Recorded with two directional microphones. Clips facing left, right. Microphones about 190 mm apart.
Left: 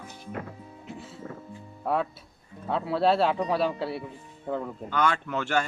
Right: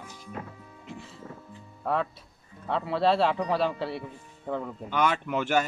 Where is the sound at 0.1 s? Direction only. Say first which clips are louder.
Left 3 dB; 60° left (ahead or behind).